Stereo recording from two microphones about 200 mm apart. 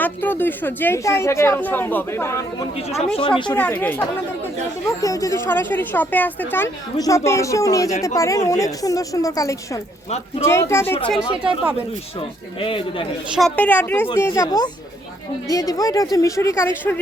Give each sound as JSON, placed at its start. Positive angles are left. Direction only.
{"t": 0.0, "sound": "a woman's voice", "side_deg": 10}
{"t": 3.0, "sound": "speech", "side_deg": 25}
{"t": 3.5, "sound": "a woman's voice", "side_deg": 10}
{"t": 12.5, "sound": "speech", "side_deg": 25}
{"t": 13.3, "sound": "a woman's voice", "side_deg": 5}